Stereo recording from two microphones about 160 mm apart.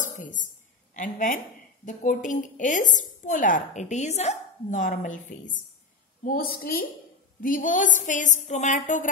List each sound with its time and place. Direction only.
0.0 s a sound: 55° left (ahead or behind)
0.9 s a woman's voice: 55° left (ahead or behind)
6.2 s a woman's voice: 65° left (ahead or behind)
7.4 s a woman's voice: 55° left (ahead or behind)